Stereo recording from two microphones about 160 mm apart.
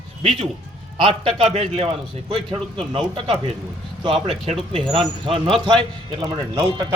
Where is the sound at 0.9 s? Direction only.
35° right (ahead or behind).